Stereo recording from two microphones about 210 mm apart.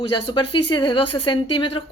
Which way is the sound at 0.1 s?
25° left (ahead or behind).